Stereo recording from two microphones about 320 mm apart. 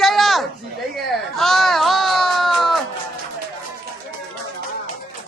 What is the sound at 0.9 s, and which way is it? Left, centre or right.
Baby cry, centre.